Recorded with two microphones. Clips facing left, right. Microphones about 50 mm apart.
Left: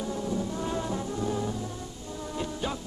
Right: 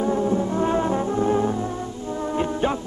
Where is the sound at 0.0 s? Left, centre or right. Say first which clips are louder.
Right 10 dB; right.